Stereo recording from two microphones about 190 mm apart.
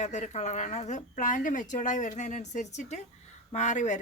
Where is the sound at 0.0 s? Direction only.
40° left (ahead or behind).